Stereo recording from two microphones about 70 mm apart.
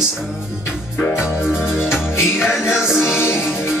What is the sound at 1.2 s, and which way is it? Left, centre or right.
Music, centre.